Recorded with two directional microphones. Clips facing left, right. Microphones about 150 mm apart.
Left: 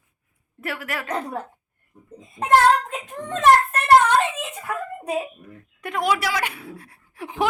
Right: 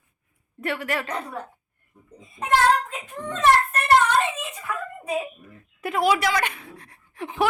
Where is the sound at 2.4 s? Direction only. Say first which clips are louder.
Left 3 dB; 45° left (ahead or behind).